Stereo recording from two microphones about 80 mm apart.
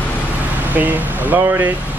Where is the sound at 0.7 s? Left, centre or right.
Right.